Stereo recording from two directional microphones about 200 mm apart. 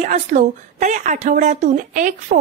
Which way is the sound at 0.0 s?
35° right (ahead or behind).